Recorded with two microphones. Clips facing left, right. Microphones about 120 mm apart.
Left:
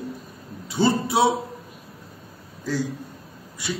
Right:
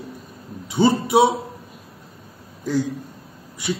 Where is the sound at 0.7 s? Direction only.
20° right (ahead or behind).